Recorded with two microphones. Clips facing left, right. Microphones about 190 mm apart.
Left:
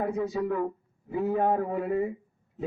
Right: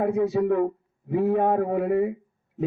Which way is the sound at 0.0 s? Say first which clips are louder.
Right 6 dB; 55° right (ahead or behind).